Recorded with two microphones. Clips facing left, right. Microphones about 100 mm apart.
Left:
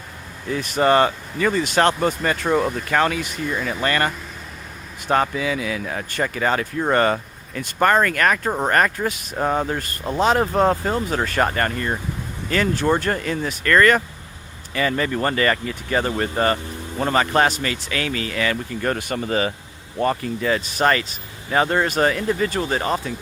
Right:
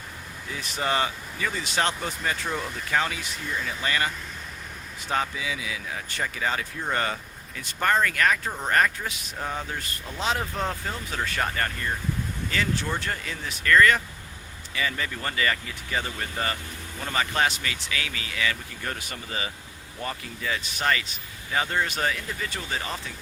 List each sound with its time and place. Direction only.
0.5 s speech: 55° left (ahead or behind)